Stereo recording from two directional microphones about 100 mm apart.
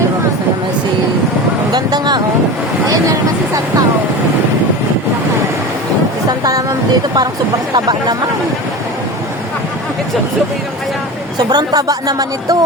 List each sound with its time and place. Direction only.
1.7 s vehicle: 45° right (ahead or behind)
6.4 s vehicle: 40° right (ahead or behind)
11.3 s speech: 45° right (ahead or behind)